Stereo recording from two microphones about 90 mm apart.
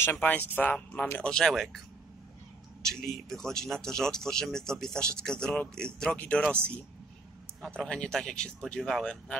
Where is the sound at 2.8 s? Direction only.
5° left (ahead or behind).